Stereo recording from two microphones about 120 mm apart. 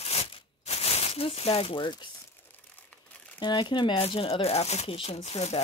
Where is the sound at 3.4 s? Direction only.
40° left (ahead or behind).